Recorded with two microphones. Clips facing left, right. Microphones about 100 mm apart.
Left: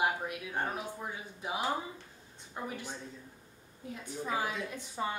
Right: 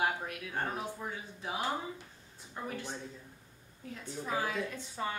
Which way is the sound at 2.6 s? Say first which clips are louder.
Left 1 dB; 15° left (ahead or behind).